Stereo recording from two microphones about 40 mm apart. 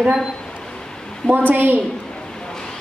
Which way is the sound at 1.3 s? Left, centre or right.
Right.